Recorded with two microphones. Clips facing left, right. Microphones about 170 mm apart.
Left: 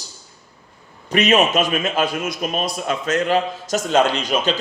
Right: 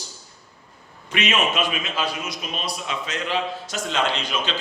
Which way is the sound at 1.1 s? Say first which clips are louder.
Left 7 dB; 40° left (ahead or behind).